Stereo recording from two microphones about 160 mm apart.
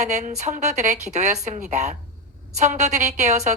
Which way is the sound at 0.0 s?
45° right (ahead or behind).